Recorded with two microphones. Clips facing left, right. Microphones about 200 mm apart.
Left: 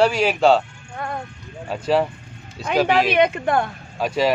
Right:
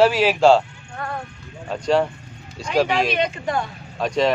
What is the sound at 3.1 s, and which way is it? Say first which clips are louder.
Speech: left 5 dB; 60° left (ahead or behind).